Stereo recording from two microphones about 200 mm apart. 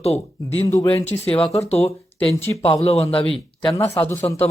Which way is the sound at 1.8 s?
10° left (ahead or behind).